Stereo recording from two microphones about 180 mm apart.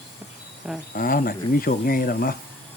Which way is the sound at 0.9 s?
50° left (ahead or behind).